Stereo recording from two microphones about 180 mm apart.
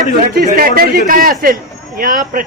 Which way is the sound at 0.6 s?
55° right (ahead or behind).